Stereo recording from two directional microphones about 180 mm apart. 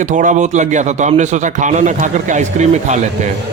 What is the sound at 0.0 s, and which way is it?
A man's voice, 45° right (ahead or behind).